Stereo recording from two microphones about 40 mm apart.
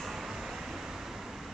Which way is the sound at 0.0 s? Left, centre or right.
Centre.